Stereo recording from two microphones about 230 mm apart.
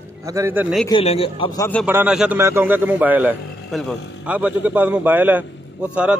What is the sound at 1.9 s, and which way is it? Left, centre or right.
A man's voice, centre.